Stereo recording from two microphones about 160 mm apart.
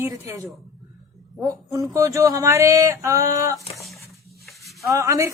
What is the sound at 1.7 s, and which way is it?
Speech, 20° right (ahead or behind).